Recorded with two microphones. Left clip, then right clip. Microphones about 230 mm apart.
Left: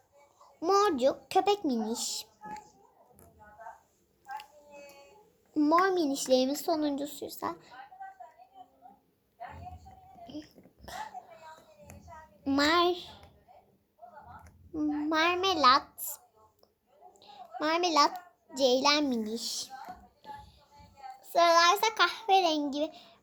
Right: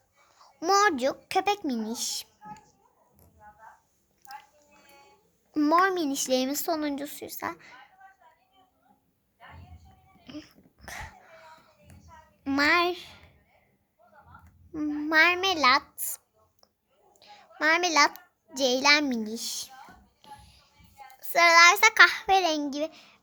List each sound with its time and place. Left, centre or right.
0.3 s a child's voice: right
5.8 s a child's voice: right
10.3 s speech: right
10.8 s a sound: right
12.4 s a child's voice: right
14.8 s a child's voice: right
15.3 s a child's voice: right
16.0 s a sound: right
17.2 s a child's voice: right
20.2 s music: right
21.2 s a child's voice: right